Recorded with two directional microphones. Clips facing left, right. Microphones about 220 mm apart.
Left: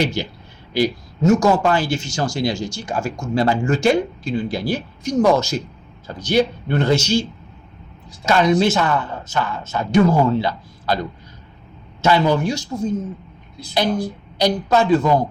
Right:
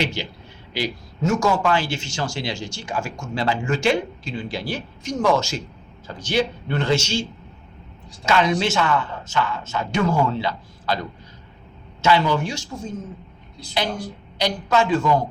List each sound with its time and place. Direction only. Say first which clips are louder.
0.2 s speech: left 5 dB; 40° left (ahead or behind)
8.2 s speech: left 4 dB; 40° left (ahead or behind)
12.0 s speech: left 3 dB; 40° left (ahead or behind)
14.3 s speech: left 4 dB; 35° left (ahead or behind)